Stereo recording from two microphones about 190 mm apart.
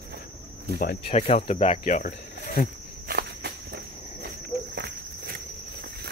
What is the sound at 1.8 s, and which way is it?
Cricket, 45° left (ahead or behind).